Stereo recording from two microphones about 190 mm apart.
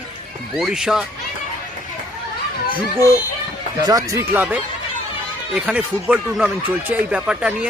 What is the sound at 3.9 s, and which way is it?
Speech, 20° right (ahead or behind).